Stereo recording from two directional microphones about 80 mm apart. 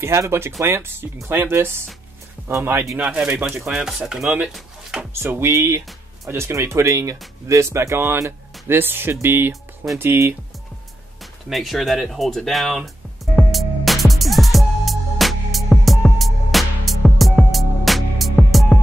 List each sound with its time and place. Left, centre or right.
0.0 s speech: right
3.0 s speech: centre
4.5 s a sound: centre
5.2 s speech: right
11.4 s music: centre